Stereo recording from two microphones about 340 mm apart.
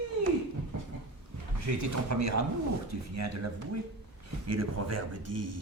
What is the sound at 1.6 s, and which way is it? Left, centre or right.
Speech, right.